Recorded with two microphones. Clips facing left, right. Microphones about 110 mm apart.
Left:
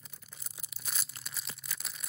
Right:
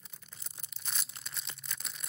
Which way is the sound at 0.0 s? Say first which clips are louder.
Left 1 dB; 5° left (ahead or behind).